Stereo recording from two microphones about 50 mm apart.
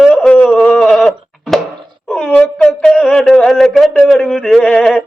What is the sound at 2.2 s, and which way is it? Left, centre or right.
Speech, left.